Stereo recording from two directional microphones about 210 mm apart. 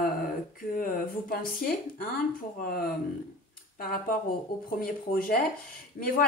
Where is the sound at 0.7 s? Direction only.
45° left (ahead or behind).